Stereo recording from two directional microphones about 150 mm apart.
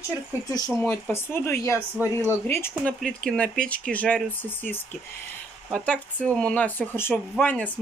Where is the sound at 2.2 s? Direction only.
15° left (ahead or behind).